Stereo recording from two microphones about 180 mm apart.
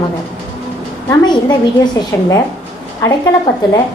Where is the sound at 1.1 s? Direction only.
25° left (ahead or behind).